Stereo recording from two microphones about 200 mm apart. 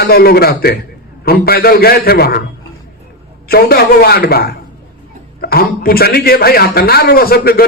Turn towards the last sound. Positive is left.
turn(degrees=50)  # may be behind; listen again after turning